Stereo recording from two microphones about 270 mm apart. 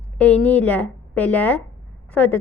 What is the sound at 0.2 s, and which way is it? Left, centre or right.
A woman's voice, centre.